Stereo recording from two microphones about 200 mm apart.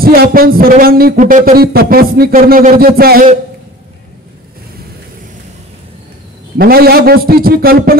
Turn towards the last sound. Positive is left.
turn(degrees=-50)  # may be behind; listen again after turning